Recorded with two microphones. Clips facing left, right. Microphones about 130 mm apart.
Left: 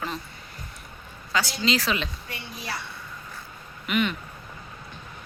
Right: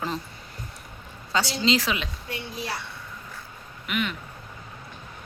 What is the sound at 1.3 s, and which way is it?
Speech, 30° right (ahead or behind).